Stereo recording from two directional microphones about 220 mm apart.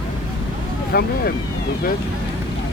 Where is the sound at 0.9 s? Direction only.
45° left (ahead or behind).